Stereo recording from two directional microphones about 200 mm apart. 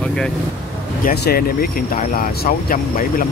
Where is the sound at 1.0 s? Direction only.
50° left (ahead or behind).